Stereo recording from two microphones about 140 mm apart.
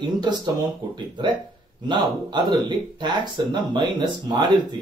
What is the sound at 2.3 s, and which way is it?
Speech, 30° right (ahead or behind).